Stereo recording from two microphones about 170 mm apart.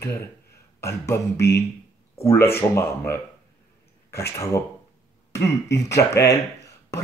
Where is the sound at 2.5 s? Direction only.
15° left (ahead or behind).